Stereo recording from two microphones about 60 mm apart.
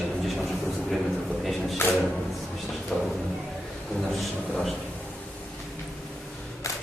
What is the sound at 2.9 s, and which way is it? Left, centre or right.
Speech, centre.